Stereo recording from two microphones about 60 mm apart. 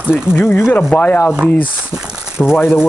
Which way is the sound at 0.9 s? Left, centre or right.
Left.